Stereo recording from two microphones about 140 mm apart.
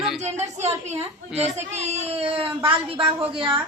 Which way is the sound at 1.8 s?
45° right (ahead or behind).